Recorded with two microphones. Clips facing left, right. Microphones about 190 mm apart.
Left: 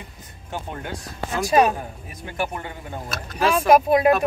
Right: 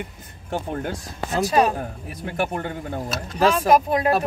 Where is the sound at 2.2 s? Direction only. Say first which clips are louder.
Right 3 dB; 60° right (ahead or behind).